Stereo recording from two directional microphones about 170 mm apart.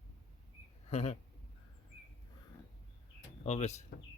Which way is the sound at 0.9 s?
40° left (ahead or behind).